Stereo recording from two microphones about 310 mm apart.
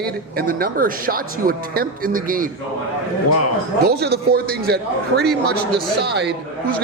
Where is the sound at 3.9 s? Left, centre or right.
Right.